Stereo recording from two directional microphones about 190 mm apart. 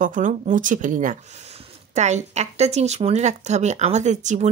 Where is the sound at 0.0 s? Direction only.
40° right (ahead or behind).